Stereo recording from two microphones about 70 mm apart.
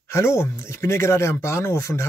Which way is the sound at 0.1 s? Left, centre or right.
Left.